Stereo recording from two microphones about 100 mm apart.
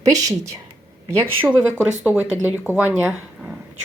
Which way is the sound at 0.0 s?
35° right (ahead or behind).